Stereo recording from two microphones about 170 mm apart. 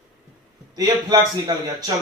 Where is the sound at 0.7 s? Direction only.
20° right (ahead or behind).